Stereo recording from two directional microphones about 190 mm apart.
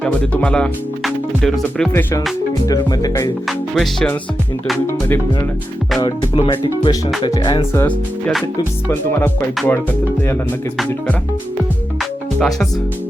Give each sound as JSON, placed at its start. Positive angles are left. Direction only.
{"t": 0.0, "sound": "speech", "side_deg": 5}
{"t": 3.8, "sound": "music", "side_deg": 5}
{"t": 4.9, "sound": "speech", "side_deg": 10}
{"t": 6.0, "sound": "speech", "side_deg": 25}
{"t": 12.4, "sound": "music", "side_deg": 0}